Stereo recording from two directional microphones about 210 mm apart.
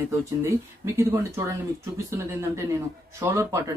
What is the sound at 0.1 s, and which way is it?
Speech, 15° right (ahead or behind).